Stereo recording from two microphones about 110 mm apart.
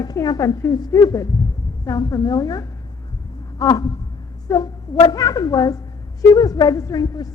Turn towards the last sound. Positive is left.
turn(degrees=35)  # may be behind; listen again after turning